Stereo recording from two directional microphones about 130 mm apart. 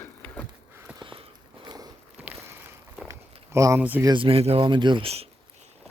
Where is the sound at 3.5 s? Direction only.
25° right (ahead or behind).